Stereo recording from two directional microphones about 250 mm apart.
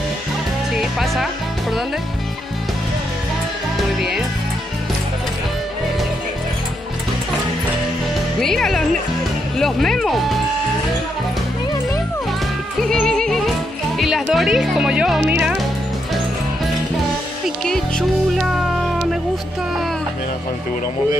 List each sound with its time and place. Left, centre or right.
0.7 s speech: centre
8.4 s speech: centre
12.8 s yodeling: centre
13.9 s speech: centre
17.6 s music: centre